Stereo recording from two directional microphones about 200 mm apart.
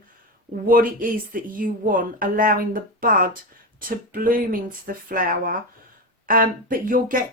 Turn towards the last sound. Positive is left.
turn(degrees=-45)  # may be behind; listen again after turning